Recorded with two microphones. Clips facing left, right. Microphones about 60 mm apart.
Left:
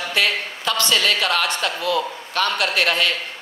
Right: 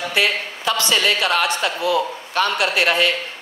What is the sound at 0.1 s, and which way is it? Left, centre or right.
A woman's voice, centre.